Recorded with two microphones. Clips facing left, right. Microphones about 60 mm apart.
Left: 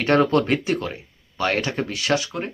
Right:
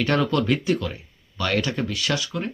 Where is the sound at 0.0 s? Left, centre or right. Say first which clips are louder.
Left 4 dB; left.